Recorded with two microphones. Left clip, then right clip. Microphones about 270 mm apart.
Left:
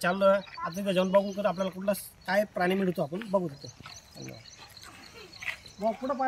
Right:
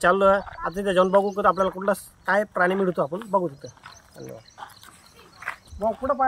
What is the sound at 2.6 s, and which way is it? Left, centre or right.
Speech, centre.